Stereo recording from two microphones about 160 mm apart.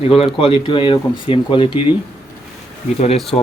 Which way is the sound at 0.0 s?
40° left (ahead or behind).